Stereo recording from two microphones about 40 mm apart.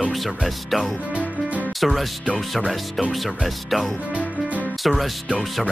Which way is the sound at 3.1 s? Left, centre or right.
Centre.